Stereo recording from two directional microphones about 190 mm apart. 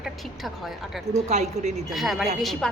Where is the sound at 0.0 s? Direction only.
Centre (ahead or behind).